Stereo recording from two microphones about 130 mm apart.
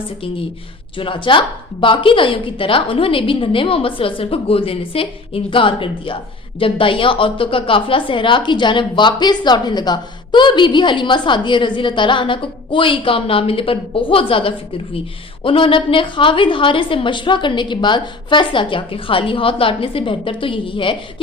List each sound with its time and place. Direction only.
0.9 s a woman's voice: 40° left (ahead or behind)